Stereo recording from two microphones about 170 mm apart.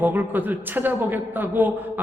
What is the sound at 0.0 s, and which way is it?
A man's voice, 10° right (ahead or behind).